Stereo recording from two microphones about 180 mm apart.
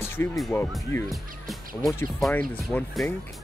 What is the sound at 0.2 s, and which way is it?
Speech, 15° left (ahead or behind).